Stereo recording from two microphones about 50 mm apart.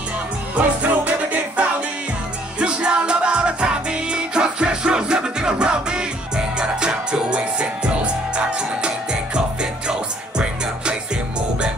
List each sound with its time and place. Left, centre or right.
0.6 s music: right
2.6 s music: centre